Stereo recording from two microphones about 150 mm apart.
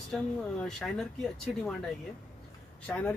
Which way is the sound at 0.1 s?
5° left (ahead or behind).